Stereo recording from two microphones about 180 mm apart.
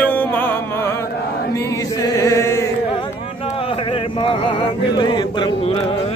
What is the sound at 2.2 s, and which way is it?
Chant, 15° left (ahead or behind).